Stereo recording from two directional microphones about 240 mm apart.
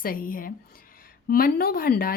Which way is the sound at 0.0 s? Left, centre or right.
Left.